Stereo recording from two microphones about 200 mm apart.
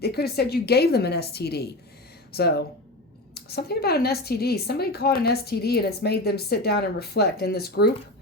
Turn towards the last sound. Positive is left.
turn(degrees=50)  # may be behind; listen again after turning